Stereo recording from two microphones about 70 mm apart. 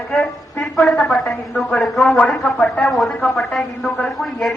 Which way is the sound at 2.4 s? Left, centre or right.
Centre.